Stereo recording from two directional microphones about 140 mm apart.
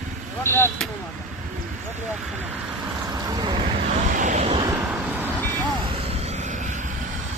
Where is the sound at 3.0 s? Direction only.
25° right (ahead or behind).